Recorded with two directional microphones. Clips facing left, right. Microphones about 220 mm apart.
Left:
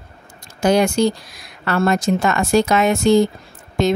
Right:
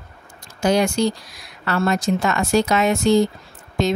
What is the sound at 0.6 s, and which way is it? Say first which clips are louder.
Speech: left 3 dB; 55° left (ahead or behind).